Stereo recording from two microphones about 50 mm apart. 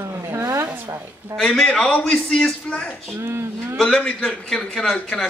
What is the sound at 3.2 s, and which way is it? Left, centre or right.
Speech, right.